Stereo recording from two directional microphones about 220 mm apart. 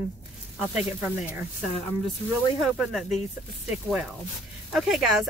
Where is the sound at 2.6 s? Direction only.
Centre (ahead or behind).